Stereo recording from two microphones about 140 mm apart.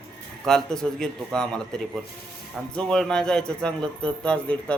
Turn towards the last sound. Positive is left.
turn(degrees=10)  # may be behind; listen again after turning